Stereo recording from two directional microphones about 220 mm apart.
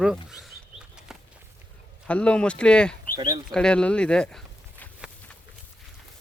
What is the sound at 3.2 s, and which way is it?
Speech, 20° right (ahead or behind).